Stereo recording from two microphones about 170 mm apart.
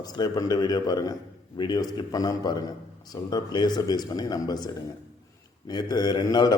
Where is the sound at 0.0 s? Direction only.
25° left (ahead or behind).